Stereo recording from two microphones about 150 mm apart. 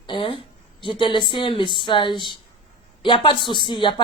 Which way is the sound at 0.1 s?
35° left (ahead or behind).